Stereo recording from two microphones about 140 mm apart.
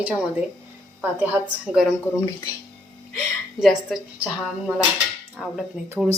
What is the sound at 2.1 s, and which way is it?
Speech, 15° left (ahead or behind).